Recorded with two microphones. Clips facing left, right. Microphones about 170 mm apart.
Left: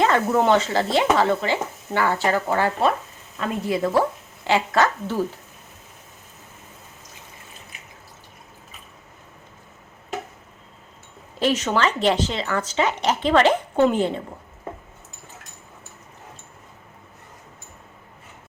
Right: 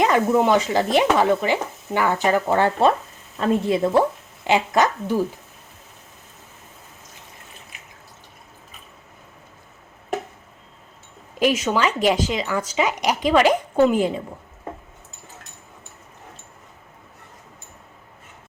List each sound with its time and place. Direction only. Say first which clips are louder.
0.0 s speech: right 1 dB; 10° right (ahead or behind)
11.3 s speech: right 1 dB; 10° right (ahead or behind)